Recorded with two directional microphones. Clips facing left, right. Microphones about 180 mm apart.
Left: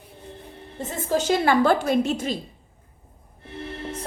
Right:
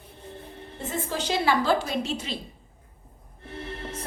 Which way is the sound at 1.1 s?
50° left (ahead or behind).